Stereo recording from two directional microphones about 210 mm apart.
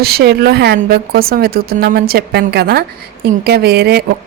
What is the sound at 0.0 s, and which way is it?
A woman's voice, 50° right (ahead or behind).